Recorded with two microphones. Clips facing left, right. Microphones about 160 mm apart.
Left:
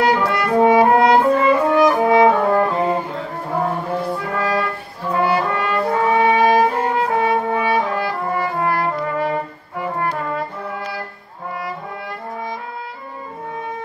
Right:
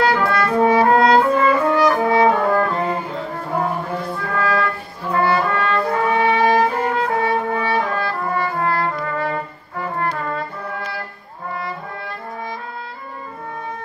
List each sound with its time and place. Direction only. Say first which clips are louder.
0.0 s french horn: even; 20° left (ahead or behind)
4.2 s music: even; 15° left (ahead or behind)
5.1 s brass instrument: even; 15° left (ahead or behind)